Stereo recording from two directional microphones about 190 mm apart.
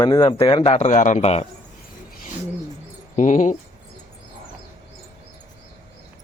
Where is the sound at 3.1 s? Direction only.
40° left (ahead or behind).